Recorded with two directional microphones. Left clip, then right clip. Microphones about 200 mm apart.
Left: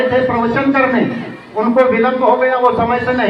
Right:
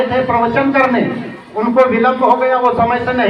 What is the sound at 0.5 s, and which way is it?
A man's voice, 25° right (ahead or behind).